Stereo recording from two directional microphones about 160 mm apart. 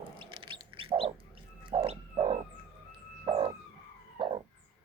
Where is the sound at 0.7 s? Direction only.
35° right (ahead or behind).